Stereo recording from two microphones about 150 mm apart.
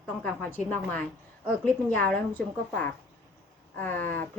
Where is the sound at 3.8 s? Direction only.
10° left (ahead or behind).